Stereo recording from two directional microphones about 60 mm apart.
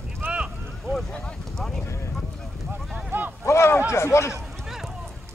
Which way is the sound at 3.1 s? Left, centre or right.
Right.